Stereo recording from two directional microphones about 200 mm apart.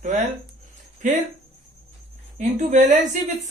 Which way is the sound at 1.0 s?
40° right (ahead or behind).